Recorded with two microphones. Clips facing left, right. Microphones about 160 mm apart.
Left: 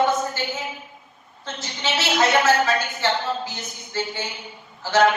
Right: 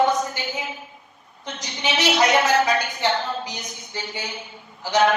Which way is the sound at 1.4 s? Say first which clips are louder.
Right 1 dB; 15° right (ahead or behind).